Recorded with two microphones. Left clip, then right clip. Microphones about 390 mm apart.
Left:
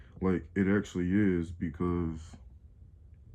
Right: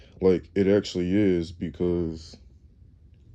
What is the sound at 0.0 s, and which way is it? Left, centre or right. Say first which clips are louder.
Speech: right 11 dB; centre.